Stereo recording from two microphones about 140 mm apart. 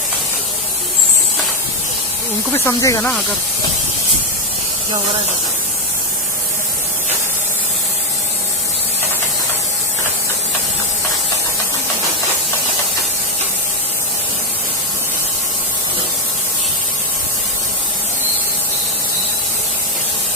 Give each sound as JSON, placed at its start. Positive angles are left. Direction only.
{"t": 2.6, "sound": "speech", "side_deg": 20}
{"t": 3.0, "sound": "speech", "side_deg": 5}